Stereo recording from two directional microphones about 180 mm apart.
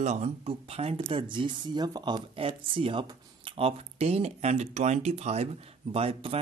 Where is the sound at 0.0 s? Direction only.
40° right (ahead or behind).